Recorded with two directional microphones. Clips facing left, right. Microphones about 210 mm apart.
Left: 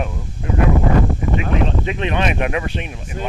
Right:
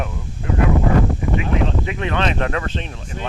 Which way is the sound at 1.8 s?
20° left (ahead or behind).